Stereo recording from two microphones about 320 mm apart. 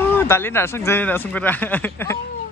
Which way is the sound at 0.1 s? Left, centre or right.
Centre.